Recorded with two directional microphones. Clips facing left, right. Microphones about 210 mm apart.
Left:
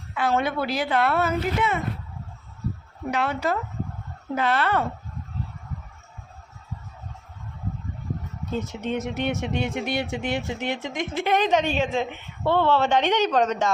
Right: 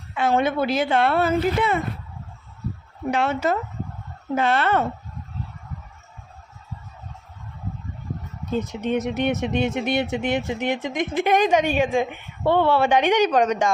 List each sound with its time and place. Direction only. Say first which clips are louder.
0.1 s a woman's voice: right 3 dB; 20° right (ahead or behind)
3.1 s a woman's voice: right 3 dB; 25° right (ahead or behind)
8.6 s speech: right 4 dB; 15° right (ahead or behind)